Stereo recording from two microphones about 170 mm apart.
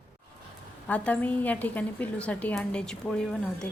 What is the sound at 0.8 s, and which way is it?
A woman's voice, 10° left (ahead or behind).